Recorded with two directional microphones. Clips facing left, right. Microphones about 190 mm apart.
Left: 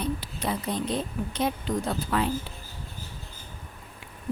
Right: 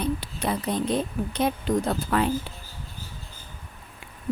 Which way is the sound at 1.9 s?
55° right (ahead or behind).